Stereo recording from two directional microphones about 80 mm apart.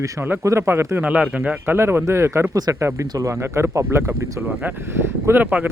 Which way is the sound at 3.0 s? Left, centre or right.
Right.